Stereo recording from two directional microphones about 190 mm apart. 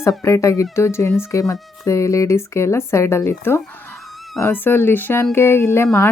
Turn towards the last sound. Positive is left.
turn(degrees=15)  # may be behind; listen again after turning